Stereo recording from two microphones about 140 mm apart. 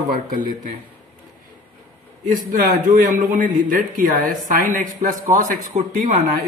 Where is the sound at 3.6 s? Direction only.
80° right.